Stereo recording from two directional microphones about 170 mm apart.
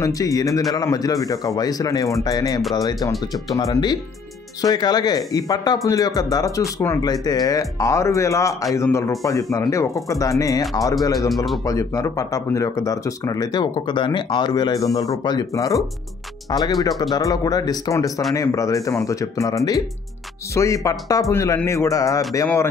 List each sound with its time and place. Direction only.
0.0 s speech: 20° left (ahead or behind)
11.1 s a man's voice: centre (ahead or behind)
11.6 s speech: 20° left (ahead or behind)